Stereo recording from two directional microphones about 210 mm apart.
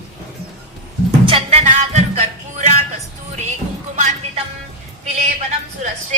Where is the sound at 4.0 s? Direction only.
35° right (ahead or behind).